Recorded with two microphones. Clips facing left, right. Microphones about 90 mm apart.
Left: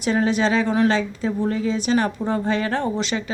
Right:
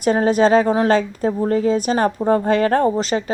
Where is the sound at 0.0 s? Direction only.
45° right (ahead or behind).